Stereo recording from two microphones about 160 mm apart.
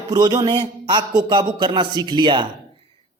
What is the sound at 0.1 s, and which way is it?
A man's voice, 25° right (ahead or behind).